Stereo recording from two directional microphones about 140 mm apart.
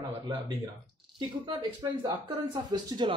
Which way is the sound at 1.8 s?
35° right (ahead or behind).